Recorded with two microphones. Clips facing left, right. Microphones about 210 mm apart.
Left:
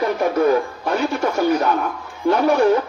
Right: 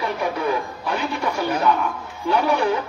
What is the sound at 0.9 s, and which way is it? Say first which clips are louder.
Music: left 4 dB; 45° left (ahead or behind).